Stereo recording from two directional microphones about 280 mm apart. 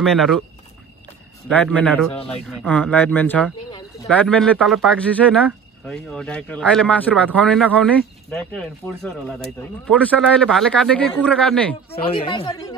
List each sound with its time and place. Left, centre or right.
0.0 s speech: centre
1.5 s speech: centre
11.9 s a woman's voice: centre